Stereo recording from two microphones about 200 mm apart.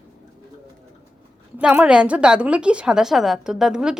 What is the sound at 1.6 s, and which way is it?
A woman's voice, 5° right (ahead or behind).